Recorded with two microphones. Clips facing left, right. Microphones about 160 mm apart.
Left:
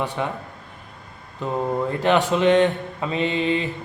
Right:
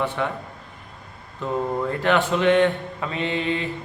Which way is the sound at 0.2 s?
20° left (ahead or behind).